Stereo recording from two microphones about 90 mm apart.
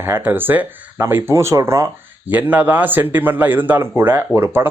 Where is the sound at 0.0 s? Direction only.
25° right (ahead or behind).